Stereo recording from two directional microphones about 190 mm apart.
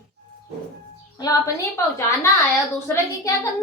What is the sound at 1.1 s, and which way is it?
A woman's voice, 20° left (ahead or behind).